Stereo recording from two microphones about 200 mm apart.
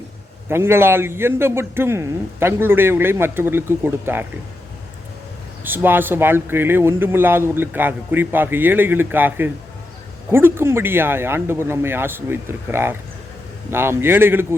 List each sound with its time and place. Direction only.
0.4 s a man's voice: 10° right (ahead or behind)
5.6 s a man's voice: 10° right (ahead or behind)